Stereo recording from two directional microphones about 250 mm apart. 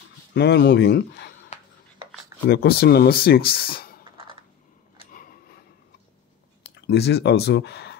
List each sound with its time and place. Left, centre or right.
0.3 s speech: left
2.4 s speech: left
6.7 s speech: left